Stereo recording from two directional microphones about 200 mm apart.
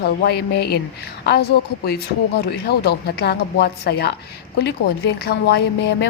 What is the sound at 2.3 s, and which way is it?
A woman's voice, 50° left (ahead or behind).